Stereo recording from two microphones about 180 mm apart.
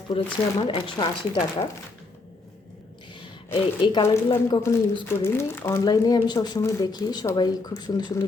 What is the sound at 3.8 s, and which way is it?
Speech, 25° left (ahead or behind).